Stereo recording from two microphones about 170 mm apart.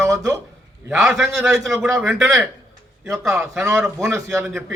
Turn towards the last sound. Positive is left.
turn(degrees=-10)  # may be behind; listen again after turning